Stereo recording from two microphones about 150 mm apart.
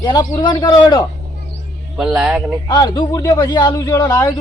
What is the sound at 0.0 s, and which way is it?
A man's voice, 30° left (ahead or behind).